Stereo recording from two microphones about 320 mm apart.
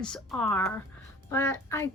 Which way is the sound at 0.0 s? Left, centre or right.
Centre.